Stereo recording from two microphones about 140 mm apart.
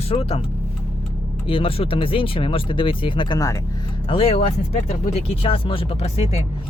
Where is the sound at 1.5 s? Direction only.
40° left (ahead or behind).